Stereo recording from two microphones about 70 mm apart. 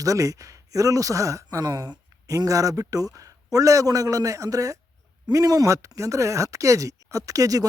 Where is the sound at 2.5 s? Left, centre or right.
Right.